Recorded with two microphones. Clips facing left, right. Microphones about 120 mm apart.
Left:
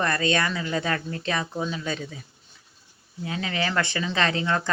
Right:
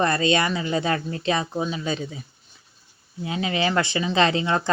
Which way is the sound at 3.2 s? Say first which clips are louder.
Right 4 dB; 20° right (ahead or behind).